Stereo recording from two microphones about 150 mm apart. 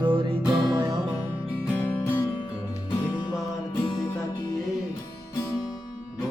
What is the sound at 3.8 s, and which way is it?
Music, 30° left (ahead or behind).